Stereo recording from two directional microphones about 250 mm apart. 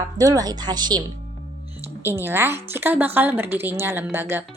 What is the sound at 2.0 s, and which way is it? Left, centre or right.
A woman's voice, centre.